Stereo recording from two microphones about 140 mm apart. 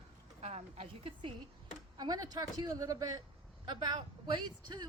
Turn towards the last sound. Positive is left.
turn(degrees=-35)  # may be behind; listen again after turning